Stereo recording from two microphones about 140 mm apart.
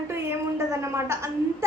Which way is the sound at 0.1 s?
20° right (ahead or behind).